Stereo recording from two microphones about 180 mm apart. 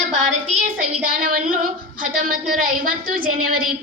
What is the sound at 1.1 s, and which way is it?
A woman's voice, 50° right (ahead or behind).